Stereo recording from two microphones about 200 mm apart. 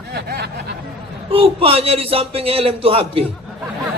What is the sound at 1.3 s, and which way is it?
A man's voice, 30° right (ahead or behind).